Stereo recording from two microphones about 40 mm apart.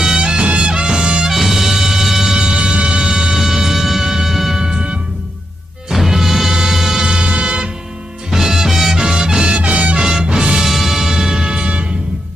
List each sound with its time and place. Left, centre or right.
0.0 s music: centre
1.3 s music: centre
2.3 s music: right
5.9 s music: centre; by 7.7 s right
8.3 s music: centre
9.5 s music: right
10.0 s music: centre
10.7 s music: centre; by 11.9 s right